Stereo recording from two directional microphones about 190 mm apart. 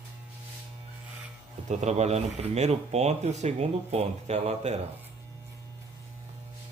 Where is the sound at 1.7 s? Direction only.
35° right (ahead or behind).